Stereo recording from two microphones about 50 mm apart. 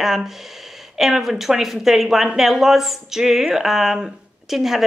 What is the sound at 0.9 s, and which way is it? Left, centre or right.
A woman's voice, centre.